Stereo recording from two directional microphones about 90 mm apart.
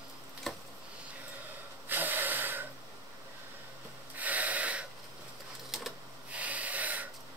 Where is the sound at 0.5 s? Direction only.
5° left (ahead or behind).